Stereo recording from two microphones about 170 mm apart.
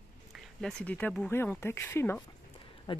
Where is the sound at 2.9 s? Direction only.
30° left (ahead or behind).